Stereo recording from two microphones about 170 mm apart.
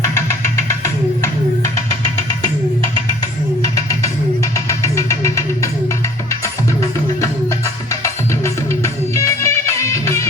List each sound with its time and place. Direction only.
0.0 s music: 15° left (ahead or behind)
3.6 s music: 20° left (ahead or behind)
8.0 s music: 15° left (ahead or behind)